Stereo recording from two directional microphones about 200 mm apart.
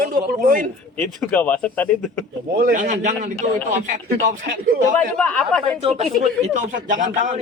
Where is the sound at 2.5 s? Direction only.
50° right (ahead or behind).